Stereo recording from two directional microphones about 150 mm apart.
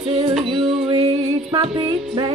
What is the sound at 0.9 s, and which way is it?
Music, 40° right (ahead or behind).